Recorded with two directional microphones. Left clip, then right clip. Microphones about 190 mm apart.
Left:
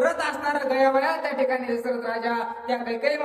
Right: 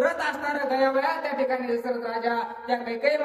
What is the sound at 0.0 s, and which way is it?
A woman's voice, 10° left (ahead or behind).